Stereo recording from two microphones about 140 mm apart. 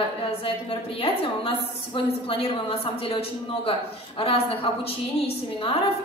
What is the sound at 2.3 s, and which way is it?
Speech, 40° left (ahead or behind).